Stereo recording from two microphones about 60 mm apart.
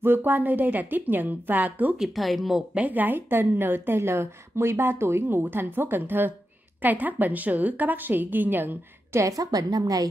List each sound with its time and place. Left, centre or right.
0.0 s a woman's voice: right
2.0 s speech: centre
2.7 s a woman's voice: right
9.1 s a woman's voice: right